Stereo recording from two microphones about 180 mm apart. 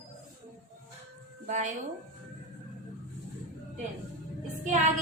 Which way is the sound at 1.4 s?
45° right (ahead or behind).